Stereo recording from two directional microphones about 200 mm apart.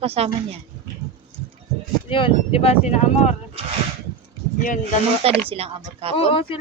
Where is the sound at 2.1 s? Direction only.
25° left (ahead or behind).